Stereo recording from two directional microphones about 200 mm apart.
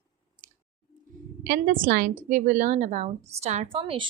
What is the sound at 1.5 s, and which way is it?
A woman's voice, 45° right (ahead or behind).